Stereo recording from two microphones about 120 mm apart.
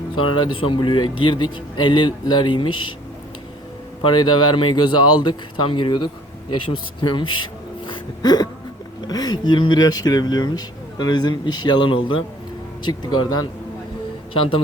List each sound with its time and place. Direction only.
0.2 s speech: 40° left (ahead or behind)
4.1 s speech: 35° left (ahead or behind)
7.9 s a sound: 35° left (ahead or behind)
9.0 s speech: 35° left (ahead or behind)